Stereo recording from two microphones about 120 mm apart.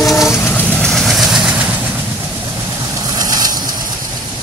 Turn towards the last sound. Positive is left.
turn(degrees=-35)  # may be behind; listen again after turning